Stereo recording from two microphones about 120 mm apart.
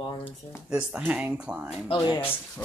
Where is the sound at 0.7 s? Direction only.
10° right (ahead or behind).